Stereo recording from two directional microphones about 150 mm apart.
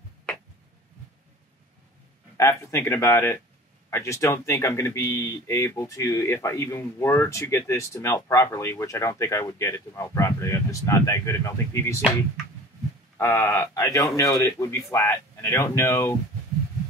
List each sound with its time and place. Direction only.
2.3 s speech: 20° left (ahead or behind)
13.2 s speech: 15° left (ahead or behind)